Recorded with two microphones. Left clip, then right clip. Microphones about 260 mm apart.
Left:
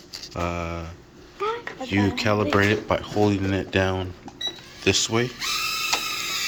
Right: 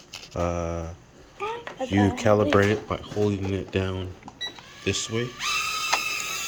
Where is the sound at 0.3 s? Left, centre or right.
Centre.